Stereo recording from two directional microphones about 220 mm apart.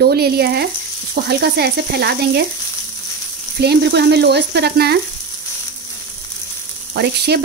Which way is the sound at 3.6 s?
50° right (ahead or behind).